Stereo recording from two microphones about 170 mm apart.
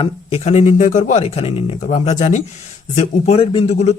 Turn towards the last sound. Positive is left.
turn(degrees=40)  # may be behind; listen again after turning